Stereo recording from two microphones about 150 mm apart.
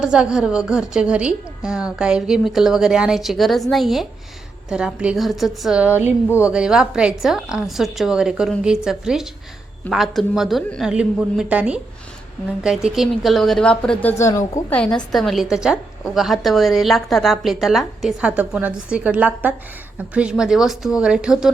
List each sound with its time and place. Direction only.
0.0 s a woman's voice: 5° right (ahead or behind)
14.2 s a woman's voice: 20° left (ahead or behind)
14.8 s a woman's voice: 5° left (ahead or behind)